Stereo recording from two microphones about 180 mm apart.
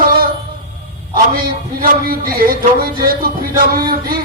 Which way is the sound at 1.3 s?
55° right (ahead or behind).